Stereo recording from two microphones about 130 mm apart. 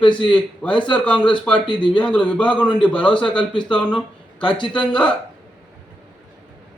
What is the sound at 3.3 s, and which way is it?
Speech, 35° left (ahead or behind).